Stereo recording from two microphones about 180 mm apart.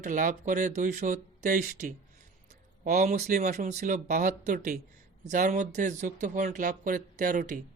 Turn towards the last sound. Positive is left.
turn(degrees=-50)  # may be behind; listen again after turning